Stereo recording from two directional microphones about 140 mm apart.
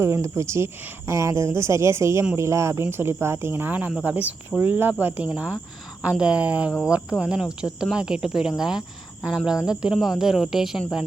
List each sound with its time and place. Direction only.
0.0 s speech: 20° right (ahead or behind); by 10.8 s 5° right (ahead or behind)